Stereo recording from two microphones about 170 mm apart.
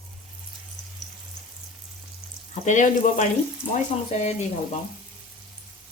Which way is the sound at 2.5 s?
45° left (ahead or behind).